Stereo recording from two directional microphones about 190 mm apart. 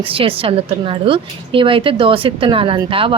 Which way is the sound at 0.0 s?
30° right (ahead or behind).